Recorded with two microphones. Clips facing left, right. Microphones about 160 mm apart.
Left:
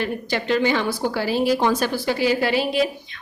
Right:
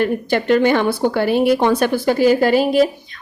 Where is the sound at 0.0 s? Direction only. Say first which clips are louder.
Right 7 dB; 50° right (ahead or behind).